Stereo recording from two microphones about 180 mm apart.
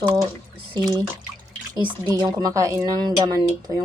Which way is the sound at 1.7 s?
20° right (ahead or behind).